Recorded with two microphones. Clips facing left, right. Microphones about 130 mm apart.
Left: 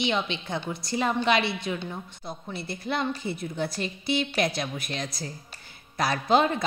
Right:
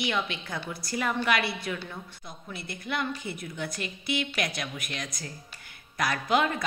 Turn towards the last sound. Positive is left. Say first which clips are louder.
# left 4 dB
turn(degrees=30)  # may be behind; listen again after turning